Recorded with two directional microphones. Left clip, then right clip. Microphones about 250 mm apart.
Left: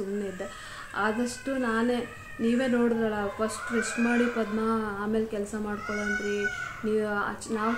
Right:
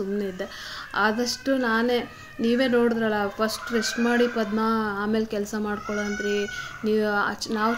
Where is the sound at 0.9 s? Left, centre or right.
Right.